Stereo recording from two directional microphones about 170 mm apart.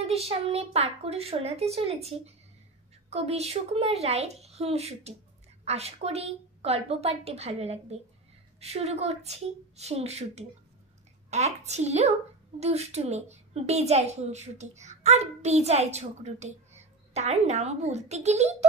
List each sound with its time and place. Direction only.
0.0 s a woman's voice: 35° right (ahead or behind)